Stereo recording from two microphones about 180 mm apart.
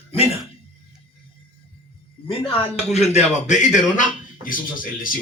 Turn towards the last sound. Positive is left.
turn(degrees=50)  # may be behind; listen again after turning